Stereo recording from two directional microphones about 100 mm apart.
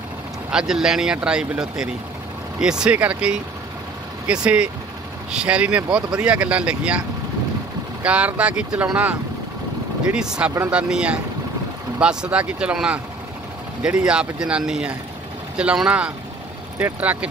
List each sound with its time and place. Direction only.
0.5 s speech: 5° right (ahead or behind)
8.0 s speech: 10° right (ahead or behind)